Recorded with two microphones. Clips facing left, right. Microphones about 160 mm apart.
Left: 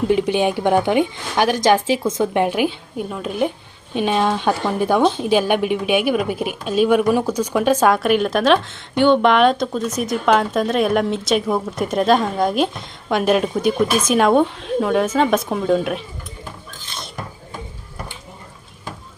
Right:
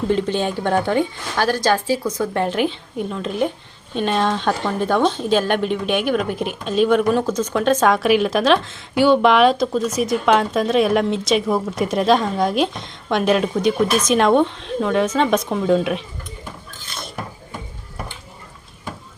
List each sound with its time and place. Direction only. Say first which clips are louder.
0.1 s a woman's voice: left 2 dB; 10° left (ahead or behind)